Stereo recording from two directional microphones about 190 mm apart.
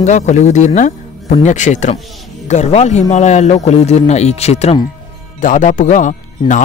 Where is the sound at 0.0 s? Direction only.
40° left (ahead or behind).